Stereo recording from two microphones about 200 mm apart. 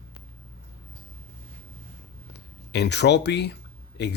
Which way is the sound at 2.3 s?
55° left (ahead or behind).